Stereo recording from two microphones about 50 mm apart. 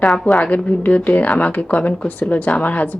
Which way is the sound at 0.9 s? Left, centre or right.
Left.